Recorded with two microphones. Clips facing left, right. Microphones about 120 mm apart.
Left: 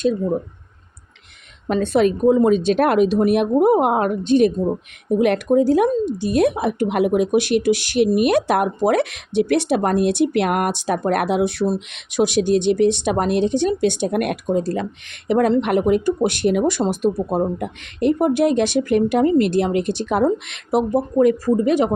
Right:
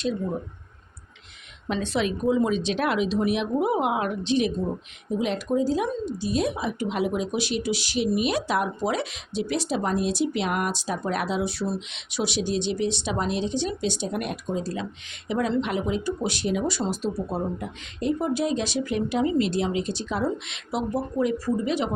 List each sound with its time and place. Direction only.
1.6 s speech: 50° left (ahead or behind)